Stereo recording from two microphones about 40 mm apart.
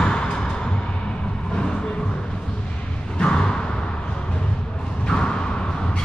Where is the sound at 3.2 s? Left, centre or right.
Left.